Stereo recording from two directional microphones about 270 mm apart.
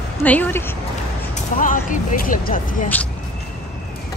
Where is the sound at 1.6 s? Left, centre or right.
Left.